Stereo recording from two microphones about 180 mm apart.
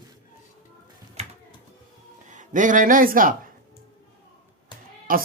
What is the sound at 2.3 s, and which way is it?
Speech, 45° right (ahead or behind).